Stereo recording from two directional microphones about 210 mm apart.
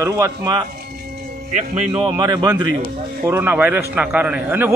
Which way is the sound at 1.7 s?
25° right (ahead or behind).